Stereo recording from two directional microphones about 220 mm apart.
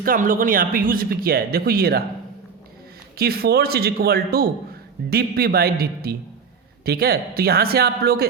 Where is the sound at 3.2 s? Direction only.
45° right (ahead or behind).